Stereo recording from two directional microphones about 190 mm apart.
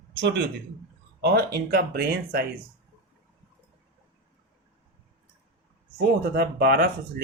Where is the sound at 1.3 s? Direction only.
55° right (ahead or behind).